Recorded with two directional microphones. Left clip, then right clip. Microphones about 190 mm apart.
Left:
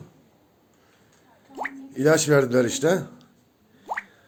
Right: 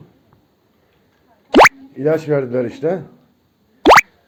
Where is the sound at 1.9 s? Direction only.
10° left (ahead or behind).